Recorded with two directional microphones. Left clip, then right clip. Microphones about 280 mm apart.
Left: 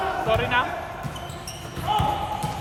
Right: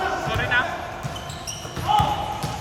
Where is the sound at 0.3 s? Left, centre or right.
Centre.